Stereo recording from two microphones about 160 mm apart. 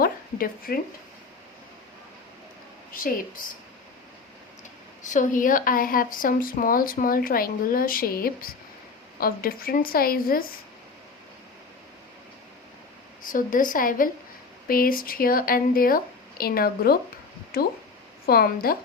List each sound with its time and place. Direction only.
0.0 s a sound: 65° left (ahead or behind)
2.9 s speech: 60° left (ahead or behind)
5.0 s speech: 50° left (ahead or behind); by 10.4 s 65° left (ahead or behind)
13.2 s a woman's voice: 55° left (ahead or behind)